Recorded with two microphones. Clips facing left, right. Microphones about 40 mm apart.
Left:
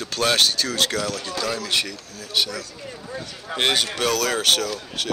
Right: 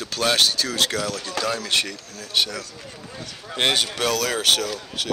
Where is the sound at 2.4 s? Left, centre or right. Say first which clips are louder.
Even; right.